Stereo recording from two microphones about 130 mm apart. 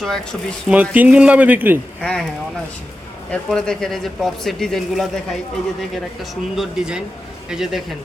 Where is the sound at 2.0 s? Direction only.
5° left (ahead or behind).